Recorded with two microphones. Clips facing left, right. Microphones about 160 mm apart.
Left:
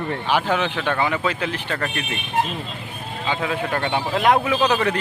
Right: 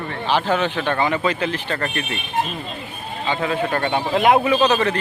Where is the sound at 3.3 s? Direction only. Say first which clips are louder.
Right 2 dB; 5° left (ahead or behind).